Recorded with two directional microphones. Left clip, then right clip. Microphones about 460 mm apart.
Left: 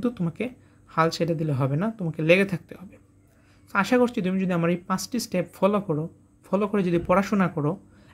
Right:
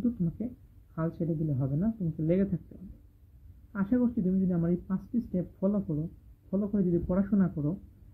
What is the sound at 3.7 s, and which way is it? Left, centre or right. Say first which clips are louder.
Speech: left 10 dB; centre.